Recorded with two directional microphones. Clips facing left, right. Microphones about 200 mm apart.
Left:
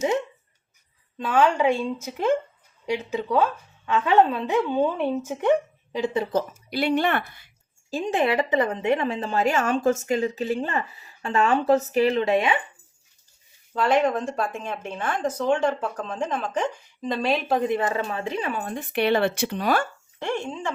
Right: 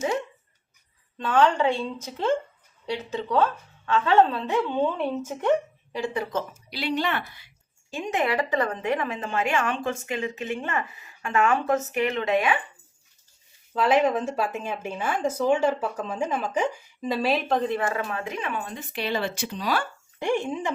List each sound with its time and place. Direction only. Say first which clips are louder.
1.2 s speech: left 1 dB; 10° left (ahead or behind)
6.7 s a woman's voice: left 5 dB; 50° left (ahead or behind)
7.9 s a woman's voice: left 3 dB; 35° left (ahead or behind)
13.7 s speech: even; centre (ahead or behind)
17.7 s speech: left 2 dB; 20° left (ahead or behind)
18.6 s speech: left 7 dB; 55° left (ahead or behind)
20.1 s speech: right 3 dB; 15° right (ahead or behind)